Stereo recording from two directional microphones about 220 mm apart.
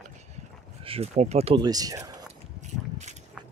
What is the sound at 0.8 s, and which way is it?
Speech, 25° right (ahead or behind).